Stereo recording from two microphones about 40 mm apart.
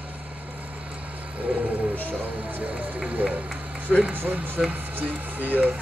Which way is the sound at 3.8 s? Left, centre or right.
Right.